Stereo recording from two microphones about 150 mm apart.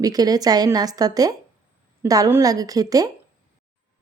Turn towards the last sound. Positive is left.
turn(degrees=-25)  # may be behind; listen again after turning